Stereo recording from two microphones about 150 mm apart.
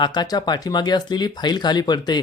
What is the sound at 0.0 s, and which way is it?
Speech, 30° left (ahead or behind).